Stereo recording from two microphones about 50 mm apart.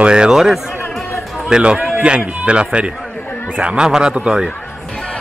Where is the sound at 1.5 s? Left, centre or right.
Centre.